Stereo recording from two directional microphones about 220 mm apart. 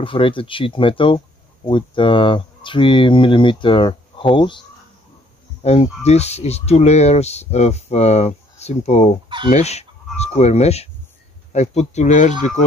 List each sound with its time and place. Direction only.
0.0 s speech: 25° left (ahead or behind)